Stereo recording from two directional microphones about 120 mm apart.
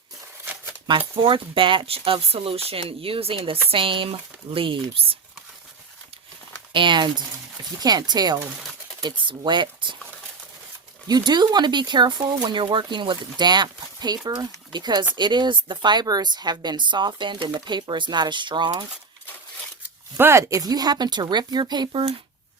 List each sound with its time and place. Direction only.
0.9 s speech: 45° right (ahead or behind)
6.7 s speech: 40° right (ahead or behind)
11.1 s speech: 35° right (ahead or behind)
20.1 s speech: 20° right (ahead or behind); by 22.1 s 40° right (ahead or behind)